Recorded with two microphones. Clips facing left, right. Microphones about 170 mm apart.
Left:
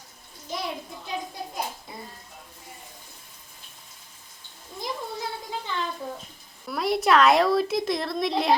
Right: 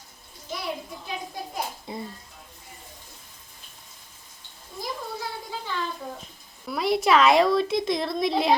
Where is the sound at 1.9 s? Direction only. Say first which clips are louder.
Right 6 dB; 25° right (ahead or behind).